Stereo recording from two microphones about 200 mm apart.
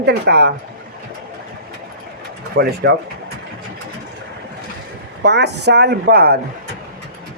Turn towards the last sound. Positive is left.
turn(degrees=-50)  # may be behind; listen again after turning